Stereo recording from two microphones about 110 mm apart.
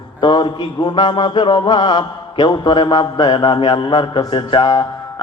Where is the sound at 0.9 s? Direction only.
40° left (ahead or behind).